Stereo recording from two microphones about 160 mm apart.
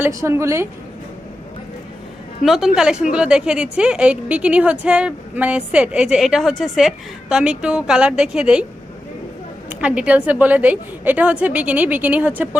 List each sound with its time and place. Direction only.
0.0 s a woman's voice: 20° right (ahead or behind)
2.4 s a woman's voice: centre (ahead or behind)
9.6 s a woman's voice: 10° right (ahead or behind)